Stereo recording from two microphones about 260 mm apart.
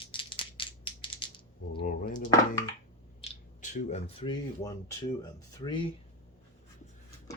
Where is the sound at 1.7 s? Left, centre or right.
Left.